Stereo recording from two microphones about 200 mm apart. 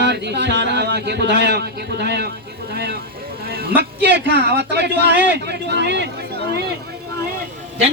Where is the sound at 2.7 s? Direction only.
55° right (ahead or behind).